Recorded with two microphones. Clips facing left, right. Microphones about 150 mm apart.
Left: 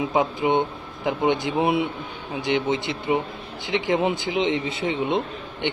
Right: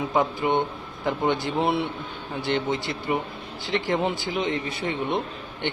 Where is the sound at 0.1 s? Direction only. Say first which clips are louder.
Even; 20° left (ahead or behind).